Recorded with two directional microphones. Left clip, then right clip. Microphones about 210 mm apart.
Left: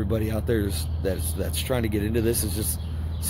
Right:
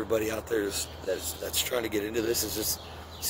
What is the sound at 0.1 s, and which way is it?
Speech, 10° right (ahead or behind).